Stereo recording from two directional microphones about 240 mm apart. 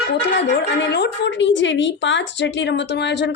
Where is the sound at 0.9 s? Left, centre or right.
Left.